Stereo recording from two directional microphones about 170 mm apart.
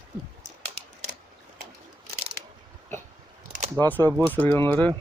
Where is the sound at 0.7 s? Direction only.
45° right (ahead or behind).